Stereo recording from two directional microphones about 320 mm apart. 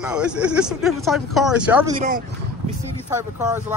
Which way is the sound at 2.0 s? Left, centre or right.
Right.